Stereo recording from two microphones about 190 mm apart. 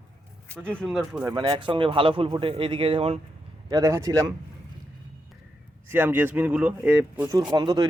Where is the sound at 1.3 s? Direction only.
25° right (ahead or behind).